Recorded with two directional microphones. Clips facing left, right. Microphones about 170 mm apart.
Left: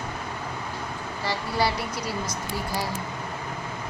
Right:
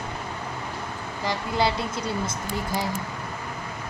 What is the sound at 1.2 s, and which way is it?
Speech, 20° right (ahead or behind).